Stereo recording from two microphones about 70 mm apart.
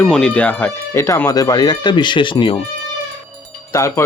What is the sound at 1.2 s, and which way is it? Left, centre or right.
Speech, left.